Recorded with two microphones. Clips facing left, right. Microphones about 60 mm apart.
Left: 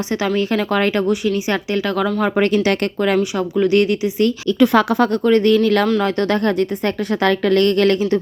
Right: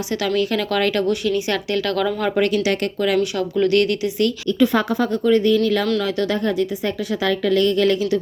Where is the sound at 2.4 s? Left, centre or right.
Left.